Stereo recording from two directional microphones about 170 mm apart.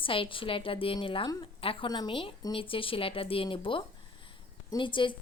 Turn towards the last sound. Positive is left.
turn(degrees=30)  # may be behind; listen again after turning